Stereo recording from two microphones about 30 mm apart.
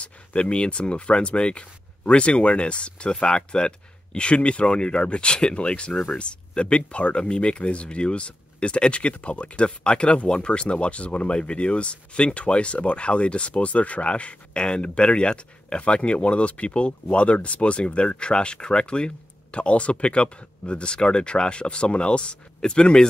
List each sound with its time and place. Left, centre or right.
0.0 s speech: left